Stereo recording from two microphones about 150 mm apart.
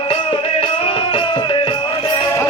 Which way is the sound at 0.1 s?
35° left (ahead or behind).